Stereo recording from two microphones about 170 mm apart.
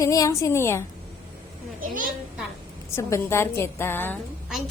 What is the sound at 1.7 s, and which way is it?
Speech, 55° right (ahead or behind).